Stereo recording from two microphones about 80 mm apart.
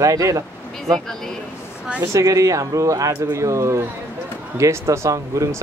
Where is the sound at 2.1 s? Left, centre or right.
Right.